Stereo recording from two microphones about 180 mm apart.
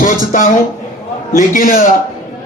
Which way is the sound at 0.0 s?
50° left (ahead or behind).